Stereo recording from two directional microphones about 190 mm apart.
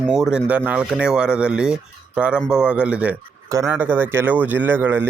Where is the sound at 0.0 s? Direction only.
5° right (ahead or behind).